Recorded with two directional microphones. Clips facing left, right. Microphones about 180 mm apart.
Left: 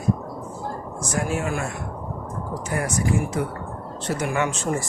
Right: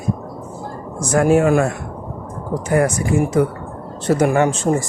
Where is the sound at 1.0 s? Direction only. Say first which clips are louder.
Right 13 dB; 55° right (ahead or behind).